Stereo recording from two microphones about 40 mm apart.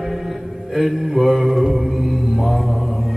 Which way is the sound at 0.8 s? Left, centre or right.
Centre.